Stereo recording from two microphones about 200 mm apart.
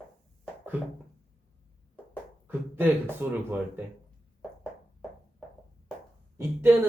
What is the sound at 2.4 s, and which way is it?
Speech, 10° right (ahead or behind).